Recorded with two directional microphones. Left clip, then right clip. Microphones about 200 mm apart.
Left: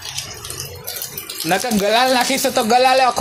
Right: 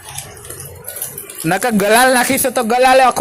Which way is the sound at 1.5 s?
55° right (ahead or behind).